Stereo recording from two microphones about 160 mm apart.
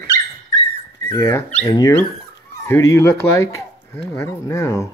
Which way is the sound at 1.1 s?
20° left (ahead or behind).